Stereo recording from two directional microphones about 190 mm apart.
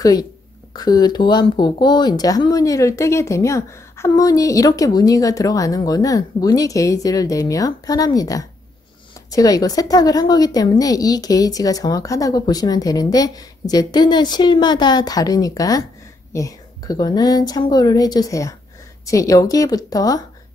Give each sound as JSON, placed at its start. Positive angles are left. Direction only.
{"t": 0.0, "sound": "speech", "side_deg": 20}